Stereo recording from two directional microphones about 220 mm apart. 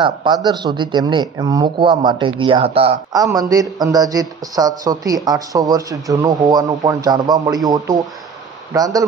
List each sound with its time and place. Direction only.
0.0 s speech: 20° right (ahead or behind)
8.7 s speech: 15° right (ahead or behind)